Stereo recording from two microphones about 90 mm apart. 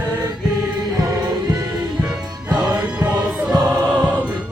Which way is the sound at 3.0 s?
20° right (ahead or behind).